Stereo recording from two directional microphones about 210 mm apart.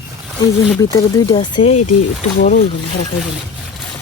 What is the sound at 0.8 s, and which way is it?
Speech, 20° left (ahead or behind).